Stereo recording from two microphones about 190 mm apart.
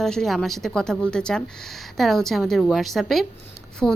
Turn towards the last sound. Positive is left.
turn(degrees=0)  # may be behind; listen again after turning